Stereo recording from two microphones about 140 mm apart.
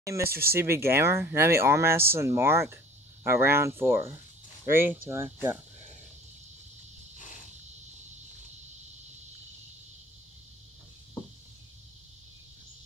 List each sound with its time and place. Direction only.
0.2 s speech: 90° right
0.5 s speech: 20° right (ahead or behind)
7.2 s cricket: 65° left (ahead or behind)